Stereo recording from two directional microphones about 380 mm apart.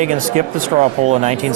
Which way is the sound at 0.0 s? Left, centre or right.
Centre.